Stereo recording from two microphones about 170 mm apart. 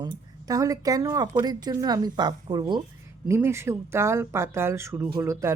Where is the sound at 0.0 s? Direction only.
25° right (ahead or behind).